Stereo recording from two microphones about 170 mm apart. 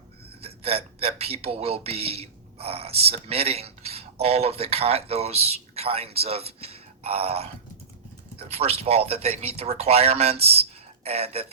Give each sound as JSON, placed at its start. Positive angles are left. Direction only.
{"t": 0.4, "sound": "speech", "side_deg": -35}